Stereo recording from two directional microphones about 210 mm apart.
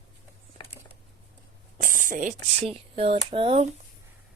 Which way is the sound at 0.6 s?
25° left (ahead or behind).